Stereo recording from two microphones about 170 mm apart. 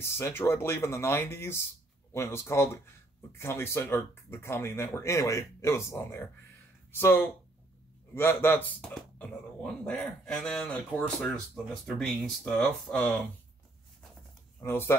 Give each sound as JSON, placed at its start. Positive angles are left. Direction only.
{"t": 0.0, "sound": "speech", "side_deg": 15}
{"t": 14.6, "sound": "speech", "side_deg": 15}